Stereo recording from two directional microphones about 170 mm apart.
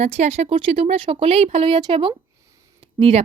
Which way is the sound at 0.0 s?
40° right (ahead or behind).